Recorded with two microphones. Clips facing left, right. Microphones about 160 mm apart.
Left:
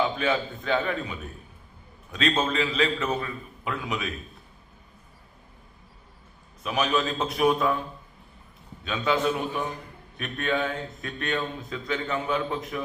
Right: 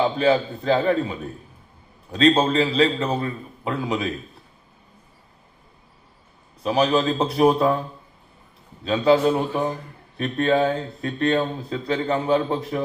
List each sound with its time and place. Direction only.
0.0 s speech: 35° right (ahead or behind)
6.6 s speech: 35° right (ahead or behind)
8.8 s speech: 30° right (ahead or behind)